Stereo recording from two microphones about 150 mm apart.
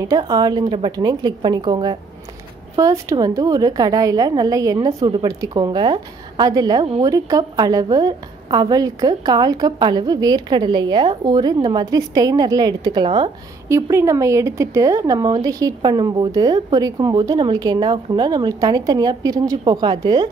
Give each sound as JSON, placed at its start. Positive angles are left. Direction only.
{"t": 0.0, "sound": "speech", "side_deg": -25}
{"t": 13.7, "sound": "speech", "side_deg": -20}